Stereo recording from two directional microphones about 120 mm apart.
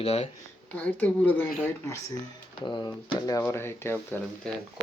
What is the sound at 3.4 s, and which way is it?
Speech, 20° left (ahead or behind).